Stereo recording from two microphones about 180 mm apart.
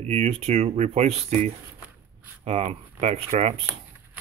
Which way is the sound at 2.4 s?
35° right (ahead or behind).